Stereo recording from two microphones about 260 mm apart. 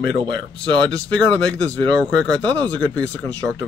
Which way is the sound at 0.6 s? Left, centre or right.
Centre.